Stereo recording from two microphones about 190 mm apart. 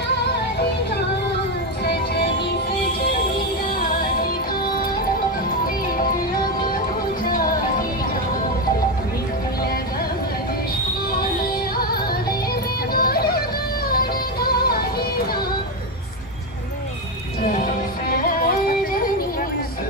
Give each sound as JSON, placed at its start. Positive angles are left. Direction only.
{"t": 11.7, "sound": "music", "side_deg": 55}